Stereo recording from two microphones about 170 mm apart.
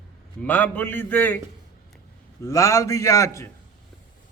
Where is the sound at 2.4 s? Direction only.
20° left (ahead or behind).